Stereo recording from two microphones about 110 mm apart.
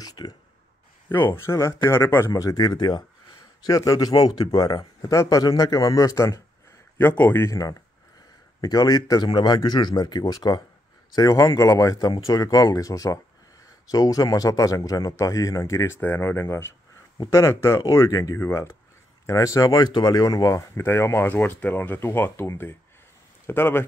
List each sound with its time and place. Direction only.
0.0 s a sound: 35° left (ahead or behind)
1.0 s speech: 20° left (ahead or behind)
7.0 s speech: 20° left (ahead or behind)